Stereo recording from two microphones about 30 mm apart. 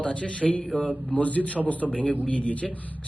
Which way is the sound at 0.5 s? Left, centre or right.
Centre.